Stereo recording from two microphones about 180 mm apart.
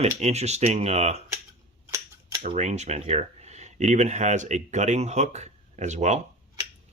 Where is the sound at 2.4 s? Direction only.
40° right (ahead or behind).